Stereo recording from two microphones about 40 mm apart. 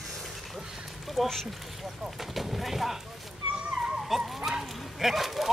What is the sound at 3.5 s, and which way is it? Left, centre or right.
Dog, centre.